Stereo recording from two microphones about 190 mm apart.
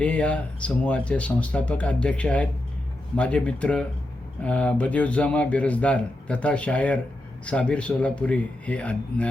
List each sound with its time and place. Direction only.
0.0 s speech: 5° left (ahead or behind)